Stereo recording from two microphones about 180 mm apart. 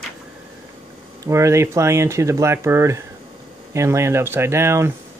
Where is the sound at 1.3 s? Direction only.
15° right (ahead or behind).